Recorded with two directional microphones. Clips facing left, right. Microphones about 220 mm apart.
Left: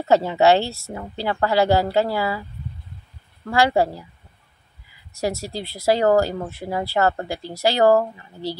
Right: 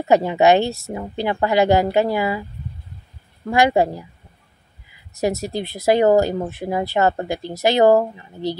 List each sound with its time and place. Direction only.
0.0 s speech: 15° right (ahead or behind)
3.4 s speech: 20° right (ahead or behind)
5.1 s speech: 20° right (ahead or behind)